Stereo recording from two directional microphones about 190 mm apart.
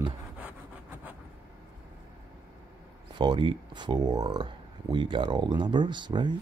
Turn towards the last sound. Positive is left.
turn(degrees=-25)  # may be behind; listen again after turning